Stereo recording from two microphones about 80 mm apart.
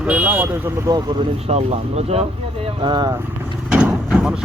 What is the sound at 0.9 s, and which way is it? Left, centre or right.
Speech, right.